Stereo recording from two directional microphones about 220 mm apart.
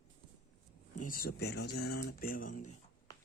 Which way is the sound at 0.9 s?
40° left (ahead or behind).